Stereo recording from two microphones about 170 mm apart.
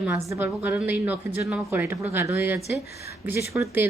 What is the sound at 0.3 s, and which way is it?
Speech, 10° right (ahead or behind).